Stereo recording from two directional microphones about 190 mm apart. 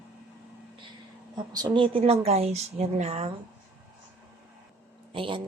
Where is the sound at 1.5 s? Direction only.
25° right (ahead or behind).